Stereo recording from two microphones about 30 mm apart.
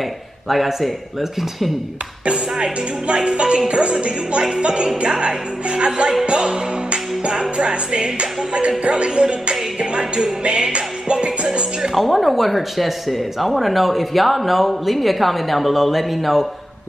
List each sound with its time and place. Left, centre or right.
0.5 s speech: centre
3.3 s music: right
11.9 s speech: centre